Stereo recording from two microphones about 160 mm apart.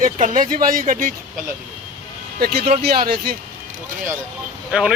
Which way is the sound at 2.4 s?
75° right (ahead or behind).